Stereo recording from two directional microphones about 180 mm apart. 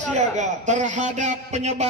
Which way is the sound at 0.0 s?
40° right (ahead or behind).